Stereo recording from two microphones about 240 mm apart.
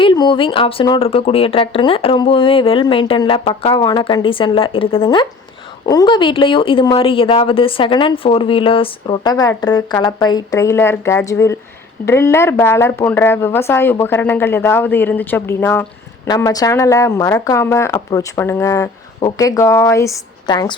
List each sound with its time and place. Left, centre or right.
0.0 s a woman's voice: centre